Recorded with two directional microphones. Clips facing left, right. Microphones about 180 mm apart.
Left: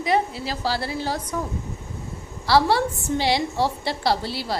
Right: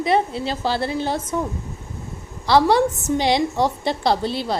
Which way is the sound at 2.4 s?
20° right (ahead or behind).